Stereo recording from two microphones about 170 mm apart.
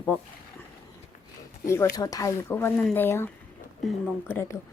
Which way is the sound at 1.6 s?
15° left (ahead or behind).